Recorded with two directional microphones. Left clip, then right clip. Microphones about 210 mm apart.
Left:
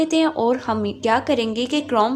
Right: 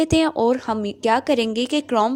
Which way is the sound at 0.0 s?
40° right (ahead or behind).